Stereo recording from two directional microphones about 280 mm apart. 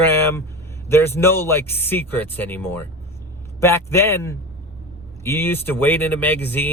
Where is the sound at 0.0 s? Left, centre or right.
Centre.